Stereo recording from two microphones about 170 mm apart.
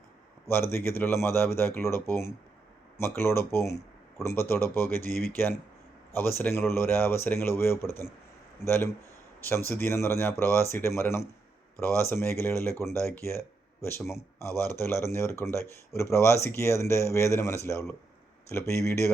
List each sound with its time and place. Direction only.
0.4 s a man's voice: 15° left (ahead or behind)
3.0 s a man's voice: 15° left (ahead or behind)